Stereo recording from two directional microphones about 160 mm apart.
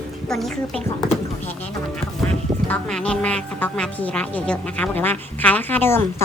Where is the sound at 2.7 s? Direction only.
5° left (ahead or behind).